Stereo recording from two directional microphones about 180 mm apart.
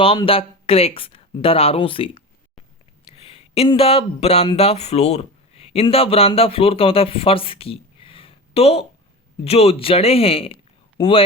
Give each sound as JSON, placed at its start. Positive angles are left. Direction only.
{"t": 0.0, "sound": "speech", "side_deg": 30}